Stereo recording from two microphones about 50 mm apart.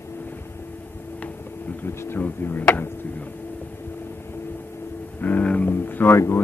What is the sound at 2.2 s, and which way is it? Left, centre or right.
Speech, left.